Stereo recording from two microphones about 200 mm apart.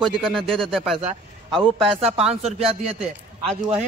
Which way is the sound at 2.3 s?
5° right (ahead or behind).